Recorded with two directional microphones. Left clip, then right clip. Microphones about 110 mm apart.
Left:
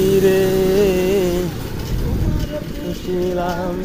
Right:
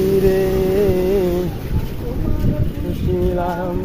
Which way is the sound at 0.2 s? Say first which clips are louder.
Left 1 dB; 10° left (ahead or behind).